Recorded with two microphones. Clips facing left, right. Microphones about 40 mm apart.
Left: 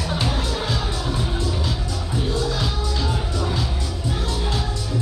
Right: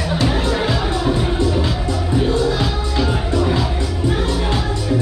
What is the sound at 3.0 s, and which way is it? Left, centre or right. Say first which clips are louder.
Music: right 10 dB; right.